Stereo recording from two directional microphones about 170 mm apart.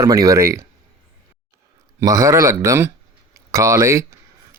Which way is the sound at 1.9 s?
20° right (ahead or behind).